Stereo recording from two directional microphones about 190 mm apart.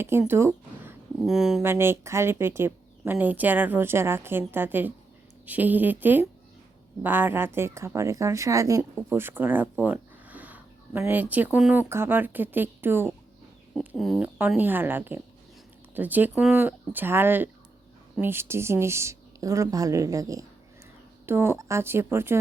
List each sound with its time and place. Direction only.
0.0 s speech: 10° right (ahead or behind)
1.2 s speech: centre (ahead or behind)
1.7 s a woman's voice: 15° right (ahead or behind)
13.7 s a woman's voice: centre (ahead or behind)